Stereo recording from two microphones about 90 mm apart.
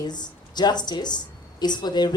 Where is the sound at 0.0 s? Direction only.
50° left (ahead or behind).